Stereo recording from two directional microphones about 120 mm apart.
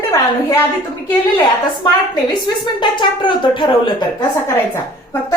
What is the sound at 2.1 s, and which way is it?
A woman's voice, 35° left (ahead or behind).